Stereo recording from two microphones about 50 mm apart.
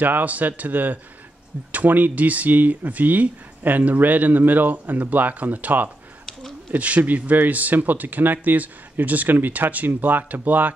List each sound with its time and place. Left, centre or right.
0.0 s speech: right